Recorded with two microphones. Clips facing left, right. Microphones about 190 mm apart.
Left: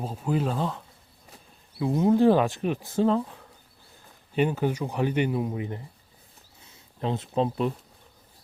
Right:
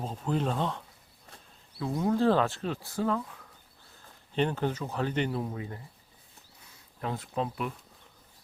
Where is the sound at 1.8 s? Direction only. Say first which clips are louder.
Left 6 dB; 20° left (ahead or behind).